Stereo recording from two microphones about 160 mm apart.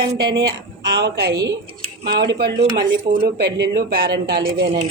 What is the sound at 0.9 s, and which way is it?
Speech, 90° right.